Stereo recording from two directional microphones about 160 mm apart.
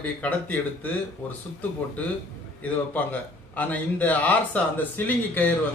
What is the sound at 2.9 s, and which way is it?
Speech, 10° left (ahead or behind).